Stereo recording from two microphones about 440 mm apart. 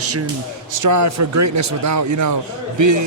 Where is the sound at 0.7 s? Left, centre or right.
Right.